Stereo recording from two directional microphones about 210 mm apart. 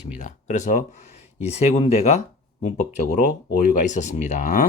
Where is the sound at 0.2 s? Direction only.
35° left (ahead or behind).